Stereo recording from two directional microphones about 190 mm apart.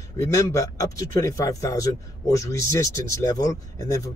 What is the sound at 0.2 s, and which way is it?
Speech, 15° left (ahead or behind).